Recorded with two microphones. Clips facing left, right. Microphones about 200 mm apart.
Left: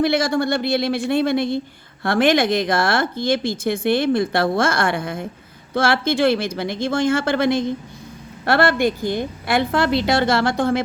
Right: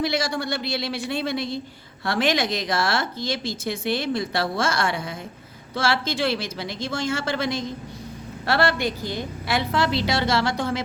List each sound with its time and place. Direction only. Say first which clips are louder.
0.0 s speech: left 7 dB; 55° left (ahead or behind)